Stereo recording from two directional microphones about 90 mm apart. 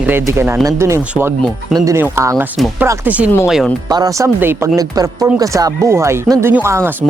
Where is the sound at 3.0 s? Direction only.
15° right (ahead or behind).